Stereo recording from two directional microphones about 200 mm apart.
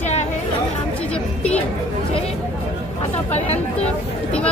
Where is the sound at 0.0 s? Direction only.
35° left (ahead or behind).